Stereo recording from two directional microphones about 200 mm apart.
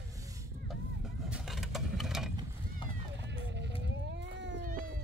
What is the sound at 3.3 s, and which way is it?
Sheep, 60° right (ahead or behind).